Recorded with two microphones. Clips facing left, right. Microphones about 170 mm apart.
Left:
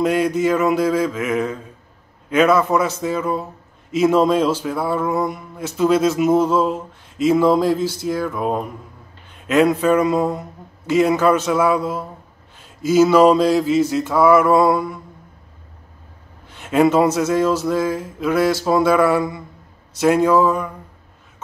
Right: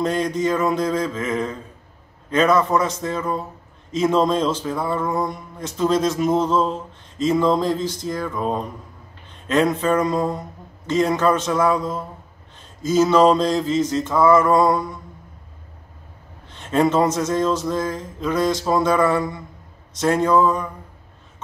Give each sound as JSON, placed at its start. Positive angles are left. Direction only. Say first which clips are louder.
{"t": 0.0, "sound": "speech", "louder": "left 4 dB", "side_deg": 10}
{"t": 16.4, "sound": "speech", "louder": "left 3 dB", "side_deg": 10}